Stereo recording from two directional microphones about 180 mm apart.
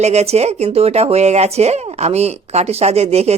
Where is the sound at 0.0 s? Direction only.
35° right (ahead or behind).